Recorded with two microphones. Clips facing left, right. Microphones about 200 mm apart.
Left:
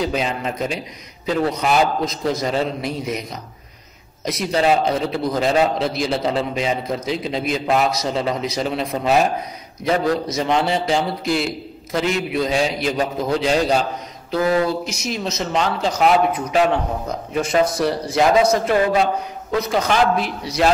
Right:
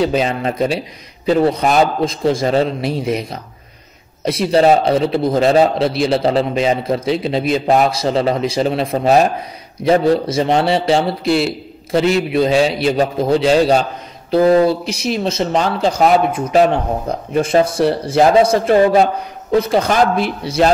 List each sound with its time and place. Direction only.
0.0 s a man's voice: 30° right (ahead or behind)
16.3 s a man's voice: 45° right (ahead or behind)